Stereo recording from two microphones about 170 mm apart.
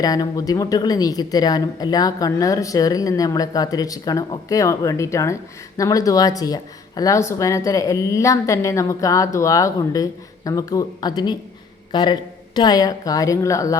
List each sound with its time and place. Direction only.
0.0 s a woman's voice: 20° left (ahead or behind)